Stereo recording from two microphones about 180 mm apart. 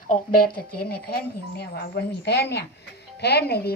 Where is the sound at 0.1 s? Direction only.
55° left (ahead or behind).